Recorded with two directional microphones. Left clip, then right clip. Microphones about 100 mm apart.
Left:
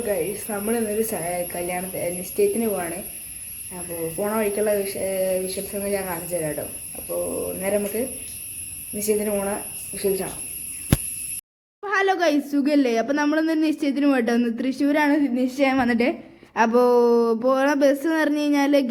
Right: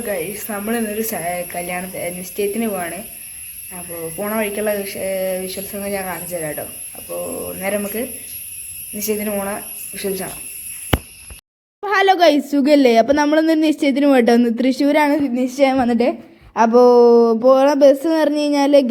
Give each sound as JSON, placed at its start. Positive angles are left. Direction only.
{"t": 0.0, "sound": "speech", "side_deg": 10}
{"t": 4.2, "sound": "speech", "side_deg": 10}
{"t": 11.8, "sound": "a woman's voice", "side_deg": -70}
{"t": 13.2, "sound": "speech", "side_deg": -55}
{"t": 15.0, "sound": "a sound", "side_deg": -50}
{"t": 15.8, "sound": "speech", "side_deg": -20}